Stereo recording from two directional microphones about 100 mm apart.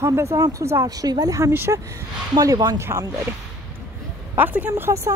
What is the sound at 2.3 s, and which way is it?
Speech, 40° right (ahead or behind).